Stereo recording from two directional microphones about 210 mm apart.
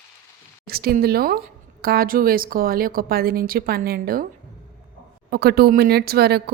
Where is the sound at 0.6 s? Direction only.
45° right (ahead or behind).